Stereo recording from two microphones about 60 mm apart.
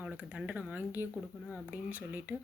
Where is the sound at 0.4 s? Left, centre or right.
Right.